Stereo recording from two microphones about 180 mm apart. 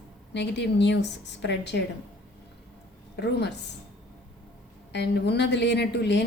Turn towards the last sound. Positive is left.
turn(degrees=75)  # may be behind; listen again after turning